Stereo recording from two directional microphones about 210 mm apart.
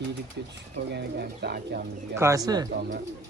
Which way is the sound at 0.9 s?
50° right (ahead or behind).